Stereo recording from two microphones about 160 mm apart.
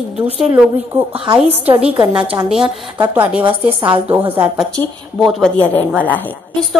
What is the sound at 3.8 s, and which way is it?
Speech, 35° right (ahead or behind).